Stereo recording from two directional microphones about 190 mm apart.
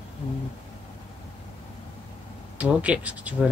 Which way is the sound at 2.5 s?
5° right (ahead or behind).